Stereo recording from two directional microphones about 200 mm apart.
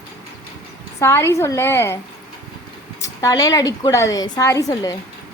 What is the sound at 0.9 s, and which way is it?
A woman's voice, 10° left (ahead or behind).